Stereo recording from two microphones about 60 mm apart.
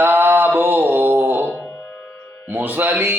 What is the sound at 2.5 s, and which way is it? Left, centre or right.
Speech, right.